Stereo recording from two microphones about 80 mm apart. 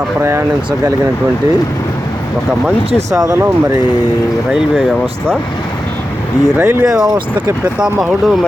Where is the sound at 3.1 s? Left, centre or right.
Right.